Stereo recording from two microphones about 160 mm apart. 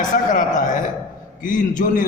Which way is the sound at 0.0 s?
55° left (ahead or behind).